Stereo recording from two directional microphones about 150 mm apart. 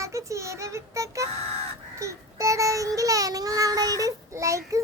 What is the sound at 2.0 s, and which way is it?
Child singing, 20° right (ahead or behind).